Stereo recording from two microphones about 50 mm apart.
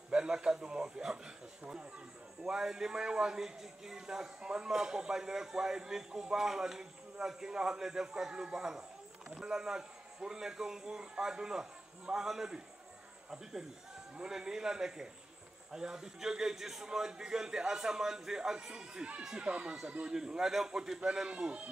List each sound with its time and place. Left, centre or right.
0.1 s a man's voice: centre
20.2 s a man's voice: centre